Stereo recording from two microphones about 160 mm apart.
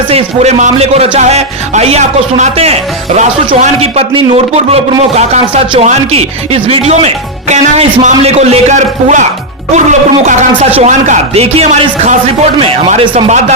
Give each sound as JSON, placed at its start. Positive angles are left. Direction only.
{"t": 0.1, "sound": "speech", "side_deg": -40}